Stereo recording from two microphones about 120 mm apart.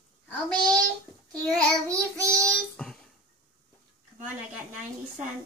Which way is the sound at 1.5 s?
25° right (ahead or behind).